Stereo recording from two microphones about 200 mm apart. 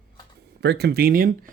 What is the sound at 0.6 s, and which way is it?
Speech, 55° right (ahead or behind).